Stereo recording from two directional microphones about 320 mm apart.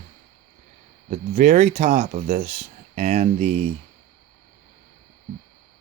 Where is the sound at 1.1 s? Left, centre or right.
Right.